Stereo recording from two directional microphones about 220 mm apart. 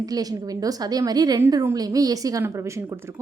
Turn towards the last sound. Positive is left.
turn(degrees=-10)  # may be behind; listen again after turning